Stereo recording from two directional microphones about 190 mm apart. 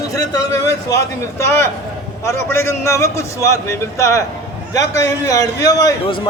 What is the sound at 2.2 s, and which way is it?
A man's voice, 15° left (ahead or behind).